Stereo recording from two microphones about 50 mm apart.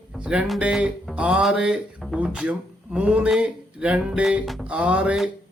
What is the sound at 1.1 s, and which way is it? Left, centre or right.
Music, right.